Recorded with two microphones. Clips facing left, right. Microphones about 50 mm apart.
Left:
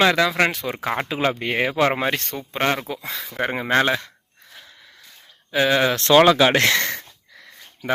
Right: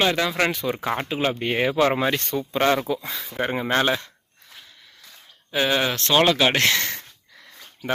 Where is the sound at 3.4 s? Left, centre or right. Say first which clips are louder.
Left 2 dB; left.